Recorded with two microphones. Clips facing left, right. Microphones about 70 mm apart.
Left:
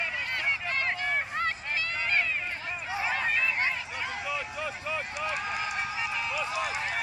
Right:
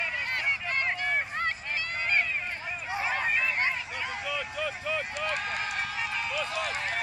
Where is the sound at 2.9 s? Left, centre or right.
Centre.